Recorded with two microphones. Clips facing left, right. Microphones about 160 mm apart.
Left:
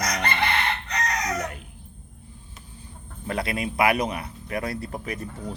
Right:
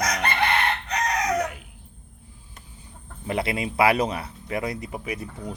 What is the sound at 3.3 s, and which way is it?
Speech, 25° right (ahead or behind).